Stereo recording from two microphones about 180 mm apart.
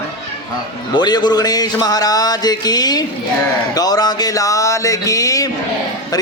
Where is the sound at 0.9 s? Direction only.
25° left (ahead or behind).